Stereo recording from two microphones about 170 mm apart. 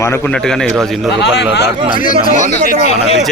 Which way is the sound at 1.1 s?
85° left.